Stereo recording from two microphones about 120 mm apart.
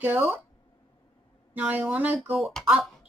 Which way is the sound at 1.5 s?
10° right (ahead or behind).